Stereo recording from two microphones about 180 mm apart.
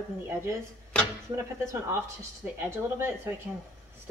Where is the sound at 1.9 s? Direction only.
15° right (ahead or behind).